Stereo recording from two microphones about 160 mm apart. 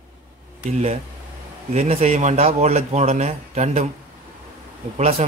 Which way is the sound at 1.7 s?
40° right (ahead or behind).